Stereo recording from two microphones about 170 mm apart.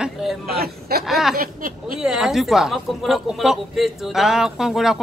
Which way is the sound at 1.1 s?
Centre (ahead or behind).